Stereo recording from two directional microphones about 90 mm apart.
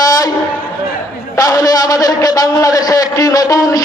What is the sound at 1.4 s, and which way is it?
A man's voice, 40° left (ahead or behind).